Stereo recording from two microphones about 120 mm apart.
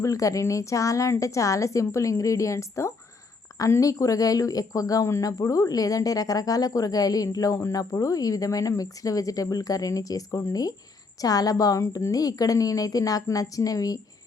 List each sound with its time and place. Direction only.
0.0 s speech: 25° left (ahead or behind)